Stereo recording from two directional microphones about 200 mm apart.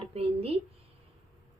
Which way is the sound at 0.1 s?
30° right (ahead or behind).